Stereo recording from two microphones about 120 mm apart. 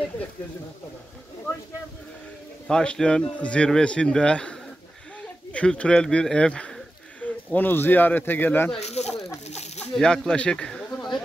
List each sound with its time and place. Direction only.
2.7 s a man's voice: 5° left (ahead or behind)
8.7 s speech: 65° left (ahead or behind)
9.5 s snake: 65° left (ahead or behind)
9.9 s speech: 5° left (ahead or behind)